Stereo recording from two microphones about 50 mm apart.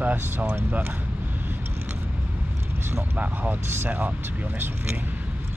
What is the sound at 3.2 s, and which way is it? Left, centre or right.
Speech, right.